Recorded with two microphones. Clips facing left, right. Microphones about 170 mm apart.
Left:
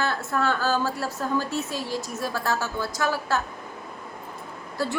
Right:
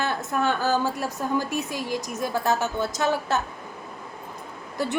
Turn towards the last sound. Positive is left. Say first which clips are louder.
# even
turn(degrees=-20)  # may be behind; listen again after turning